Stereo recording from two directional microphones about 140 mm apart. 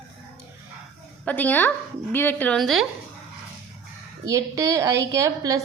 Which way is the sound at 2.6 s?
Centre (ahead or behind).